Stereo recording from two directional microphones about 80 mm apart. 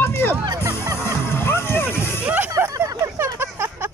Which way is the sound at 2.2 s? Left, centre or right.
Right.